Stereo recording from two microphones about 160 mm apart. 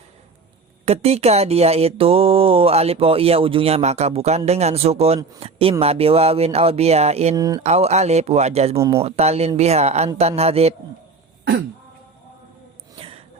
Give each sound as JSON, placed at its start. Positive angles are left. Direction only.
{"t": 0.9, "sound": "speech", "side_deg": -40}
{"t": 7.3, "sound": "speech", "side_deg": -25}
{"t": 7.6, "sound": "speech", "side_deg": -40}